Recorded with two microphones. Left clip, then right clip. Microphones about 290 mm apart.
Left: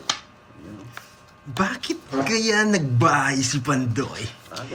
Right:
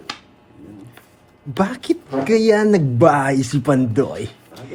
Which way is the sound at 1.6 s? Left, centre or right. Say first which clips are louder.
Right 5 dB; centre.